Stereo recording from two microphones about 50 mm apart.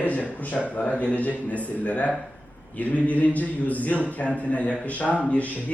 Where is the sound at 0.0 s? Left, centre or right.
Left.